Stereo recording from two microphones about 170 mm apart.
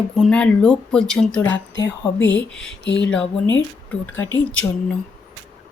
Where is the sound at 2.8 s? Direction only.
90° left.